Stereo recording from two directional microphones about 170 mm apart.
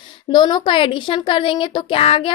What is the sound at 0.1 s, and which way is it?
A woman's voice, 25° left (ahead or behind).